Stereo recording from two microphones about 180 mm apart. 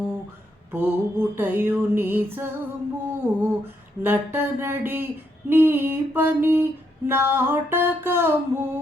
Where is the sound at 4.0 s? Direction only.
10° right (ahead or behind).